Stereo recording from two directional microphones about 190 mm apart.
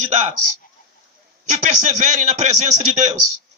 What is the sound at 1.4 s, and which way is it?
A man's voice, 40° right (ahead or behind).